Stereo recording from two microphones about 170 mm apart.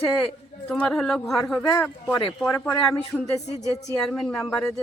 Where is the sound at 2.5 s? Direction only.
15° left (ahead or behind).